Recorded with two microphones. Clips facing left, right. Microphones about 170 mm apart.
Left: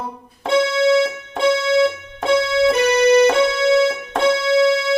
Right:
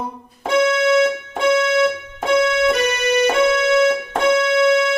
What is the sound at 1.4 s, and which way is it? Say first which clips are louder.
Keyboard: left 1 dB; 35° left (ahead or behind).